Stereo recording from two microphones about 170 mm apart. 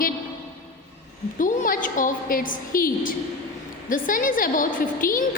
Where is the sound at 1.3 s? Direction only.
50° left (ahead or behind).